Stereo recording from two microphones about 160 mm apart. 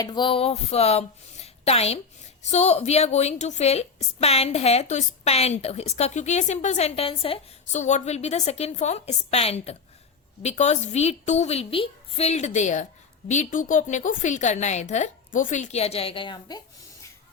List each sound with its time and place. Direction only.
0.0 s a woman's voice: 30° left (ahead or behind)
7.7 s a woman's voice: 45° left (ahead or behind); by 16.6 s 30° left (ahead or behind)